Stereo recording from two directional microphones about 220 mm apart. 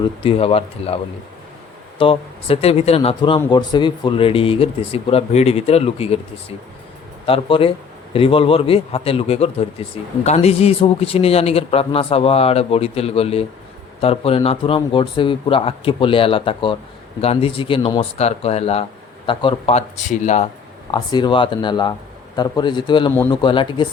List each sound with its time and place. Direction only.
0.2 s a man's voice: 25° left (ahead or behind)
2.0 s a man's voice: 25° left (ahead or behind)
7.3 s a man's voice: 25° left (ahead or behind)
20.9 s a man's voice: 20° left (ahead or behind)